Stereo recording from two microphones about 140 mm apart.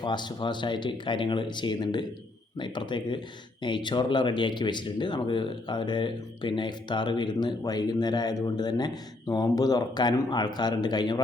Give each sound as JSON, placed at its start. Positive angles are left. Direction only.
{"t": 0.0, "sound": "speech", "side_deg": 30}